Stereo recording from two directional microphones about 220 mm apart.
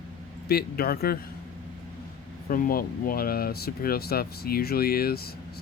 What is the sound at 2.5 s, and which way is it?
Speech, 40° left (ahead or behind).